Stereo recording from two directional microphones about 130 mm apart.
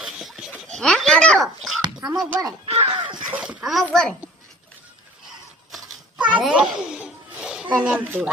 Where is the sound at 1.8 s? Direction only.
35° right (ahead or behind).